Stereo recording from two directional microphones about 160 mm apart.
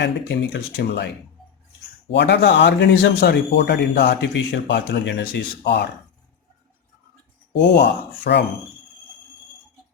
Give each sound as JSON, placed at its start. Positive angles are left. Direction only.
{"t": 0.0, "sound": "a man's voice", "side_deg": 90}
{"t": 7.5, "sound": "a man's voice", "side_deg": 90}